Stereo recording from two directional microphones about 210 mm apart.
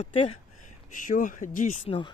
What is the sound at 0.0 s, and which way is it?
Speech, 25° left (ahead or behind).